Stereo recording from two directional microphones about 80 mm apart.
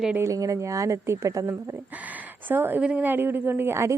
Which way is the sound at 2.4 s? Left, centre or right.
Right.